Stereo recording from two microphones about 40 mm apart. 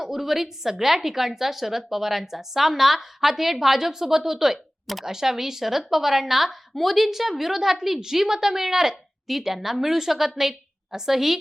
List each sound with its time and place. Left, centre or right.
0.0 s a woman's voice: centre